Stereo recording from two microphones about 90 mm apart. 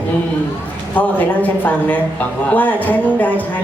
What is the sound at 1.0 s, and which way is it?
A woman's voice, 15° left (ahead or behind).